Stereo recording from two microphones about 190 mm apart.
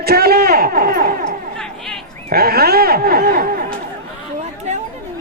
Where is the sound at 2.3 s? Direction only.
55° right (ahead or behind).